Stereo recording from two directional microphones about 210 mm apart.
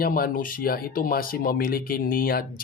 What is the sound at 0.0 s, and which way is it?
Speech, 45° left (ahead or behind).